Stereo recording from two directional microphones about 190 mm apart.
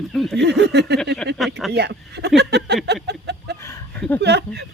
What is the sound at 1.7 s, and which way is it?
Speech, 60° right (ahead or behind).